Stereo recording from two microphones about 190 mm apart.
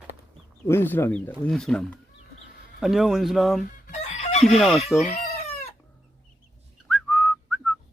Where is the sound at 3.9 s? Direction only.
35° left (ahead or behind).